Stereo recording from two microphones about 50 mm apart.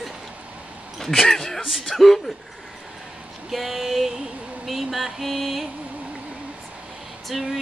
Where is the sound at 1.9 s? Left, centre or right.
Centre.